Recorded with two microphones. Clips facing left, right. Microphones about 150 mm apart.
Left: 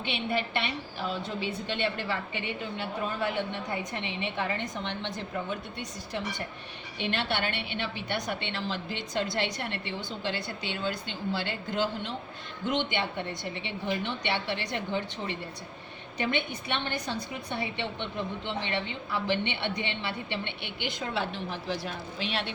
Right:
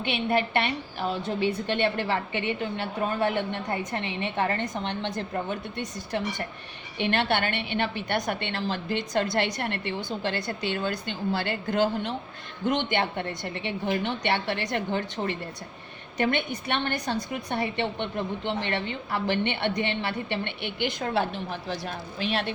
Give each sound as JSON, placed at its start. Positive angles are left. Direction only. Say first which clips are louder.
{"t": 0.0, "sound": "a woman's voice", "louder": "right 5 dB", "side_deg": -55}
{"t": 7.0, "sound": "a woman's voice", "louder": "right 5 dB", "side_deg": -60}